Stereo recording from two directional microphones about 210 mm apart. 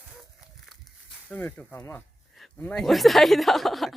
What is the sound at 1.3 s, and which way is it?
Speech, 10° left (ahead or behind).